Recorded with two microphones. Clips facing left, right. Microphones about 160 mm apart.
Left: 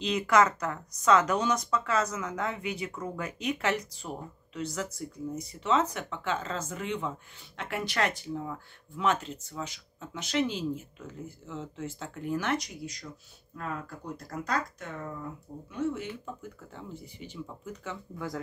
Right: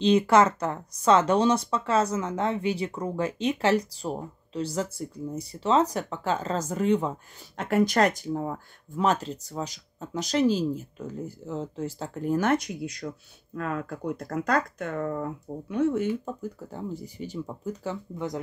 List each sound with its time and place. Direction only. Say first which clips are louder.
0.0 s speech: right 5 dB; 30° right (ahead or behind); by 16.1 s 55° right (ahead or behind)
16.3 s speech: right 8 dB; 40° right (ahead or behind)
18.1 s speech: right 2 dB; 20° right (ahead or behind)